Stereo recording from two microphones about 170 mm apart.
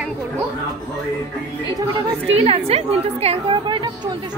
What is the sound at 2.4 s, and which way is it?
A woman's voice, 35° right (ahead or behind).